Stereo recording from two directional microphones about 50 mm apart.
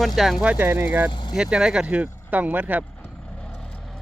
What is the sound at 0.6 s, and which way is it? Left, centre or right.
Speech, right.